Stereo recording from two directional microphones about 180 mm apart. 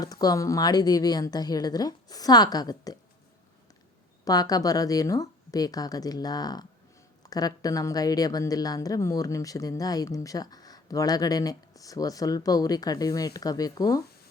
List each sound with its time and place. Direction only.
0.0 s speech: 20° left (ahead or behind)
4.3 s speech: 20° left (ahead or behind)